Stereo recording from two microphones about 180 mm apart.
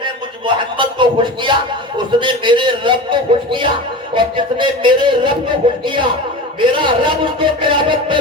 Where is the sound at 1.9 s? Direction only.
25° right (ahead or behind).